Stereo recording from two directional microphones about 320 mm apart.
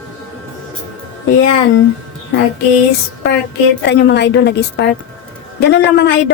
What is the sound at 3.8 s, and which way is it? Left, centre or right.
Speech, left.